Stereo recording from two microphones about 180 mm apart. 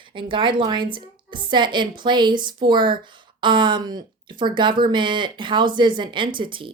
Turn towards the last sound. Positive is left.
turn(degrees=-25)  # may be behind; listen again after turning